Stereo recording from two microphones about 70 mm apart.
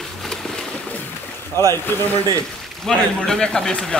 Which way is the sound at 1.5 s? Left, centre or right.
Left.